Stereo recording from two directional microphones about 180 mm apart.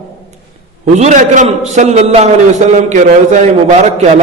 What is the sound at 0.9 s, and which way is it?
A man's voice, 40° right (ahead or behind).